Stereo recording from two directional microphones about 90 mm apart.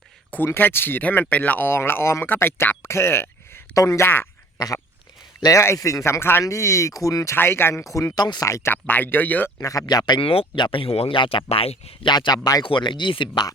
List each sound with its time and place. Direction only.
0.3 s speech: 25° left (ahead or behind)
5.4 s speech: 35° left (ahead or behind)
7.3 s speech: 25° left (ahead or behind)
8.1 s speech: 50° left (ahead or behind)
8.4 s speech: 30° left (ahead or behind)
8.9 s speech: 20° left (ahead or behind)
9.6 s speech: 40° left (ahead or behind)
9.8 s speech: 50° left (ahead or behind)
10.2 s speech: 90° left
12.1 s speech: 55° left (ahead or behind)